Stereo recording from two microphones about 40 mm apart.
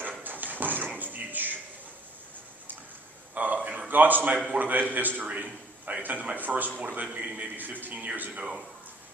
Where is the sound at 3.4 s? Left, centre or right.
Right.